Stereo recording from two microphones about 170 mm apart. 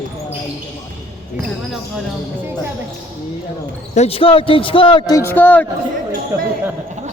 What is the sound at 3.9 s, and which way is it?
A man's voice, 35° left (ahead or behind).